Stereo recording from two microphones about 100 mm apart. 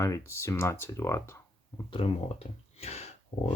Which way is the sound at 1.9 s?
80° left.